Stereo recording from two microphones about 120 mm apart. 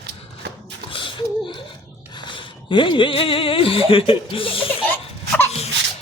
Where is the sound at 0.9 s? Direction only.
45° left (ahead or behind).